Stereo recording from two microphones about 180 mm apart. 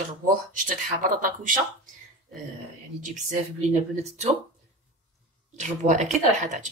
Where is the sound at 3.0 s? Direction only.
40° right (ahead or behind).